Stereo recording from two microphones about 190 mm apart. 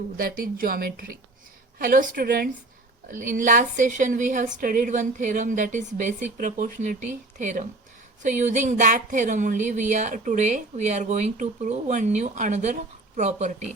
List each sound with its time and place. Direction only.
0.2 s a woman's voice: 50° right (ahead or behind)